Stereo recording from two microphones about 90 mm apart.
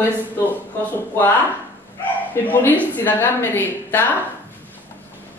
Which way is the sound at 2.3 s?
25° left (ahead or behind).